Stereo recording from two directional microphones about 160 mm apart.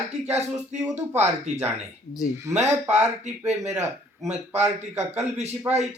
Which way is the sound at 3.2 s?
45° right (ahead or behind).